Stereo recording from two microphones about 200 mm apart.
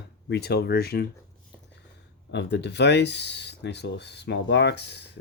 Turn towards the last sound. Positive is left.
turn(degrees=60)  # may be behind; listen again after turning